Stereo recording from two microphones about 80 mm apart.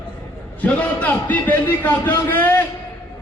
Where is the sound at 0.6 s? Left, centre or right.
Centre.